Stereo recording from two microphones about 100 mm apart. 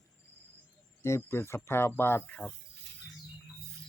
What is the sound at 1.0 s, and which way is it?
Speech, 25° left (ahead or behind).